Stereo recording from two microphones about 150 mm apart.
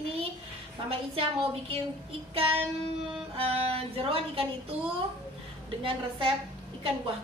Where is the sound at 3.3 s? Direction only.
40° right (ahead or behind).